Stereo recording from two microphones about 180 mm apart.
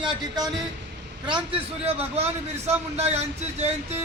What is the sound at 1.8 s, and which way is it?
A man's voice, 35° right (ahead or behind).